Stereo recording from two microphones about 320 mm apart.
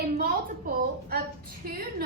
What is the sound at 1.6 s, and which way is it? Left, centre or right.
Speech, right.